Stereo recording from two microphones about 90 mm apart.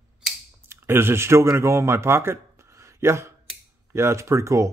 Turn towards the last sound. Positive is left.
turn(degrees=-35)  # may be behind; listen again after turning